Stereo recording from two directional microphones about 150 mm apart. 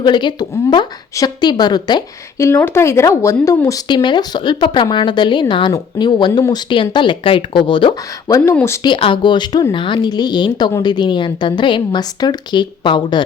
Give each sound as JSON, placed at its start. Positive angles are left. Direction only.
{"t": 0.0, "sound": "speech", "side_deg": 30}
{"t": 2.5, "sound": "a woman's voice", "side_deg": 15}
{"t": 8.5, "sound": "speech", "side_deg": 15}
{"t": 8.8, "sound": "a woman's voice", "side_deg": 35}